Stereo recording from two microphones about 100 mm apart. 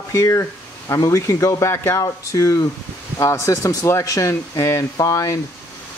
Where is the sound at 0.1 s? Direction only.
30° left (ahead or behind).